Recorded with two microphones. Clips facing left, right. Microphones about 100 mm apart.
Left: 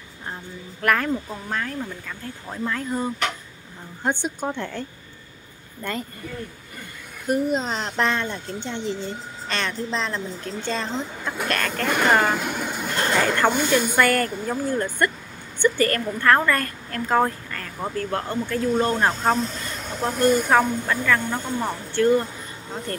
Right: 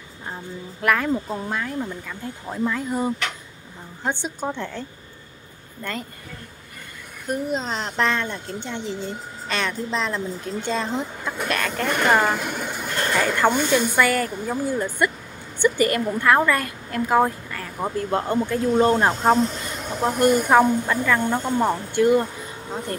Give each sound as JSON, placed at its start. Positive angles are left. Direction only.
{"t": 0.8, "sound": "a woman's voice", "side_deg": 0}
{"t": 4.0, "sound": "speech", "side_deg": 5}
{"t": 7.2, "sound": "a woman's voice", "side_deg": 5}